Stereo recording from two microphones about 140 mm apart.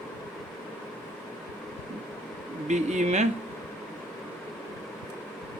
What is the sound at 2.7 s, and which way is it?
Speech, 55° right (ahead or behind).